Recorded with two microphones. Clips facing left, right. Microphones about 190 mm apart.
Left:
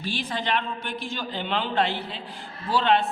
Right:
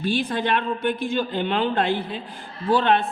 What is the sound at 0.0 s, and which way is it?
A man's voice, 55° right (ahead or behind).